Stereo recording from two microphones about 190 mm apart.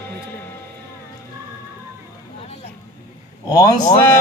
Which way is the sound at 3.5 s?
20° left (ahead or behind).